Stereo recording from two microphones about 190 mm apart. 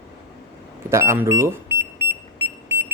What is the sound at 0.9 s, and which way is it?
Speech, 15° right (ahead or behind).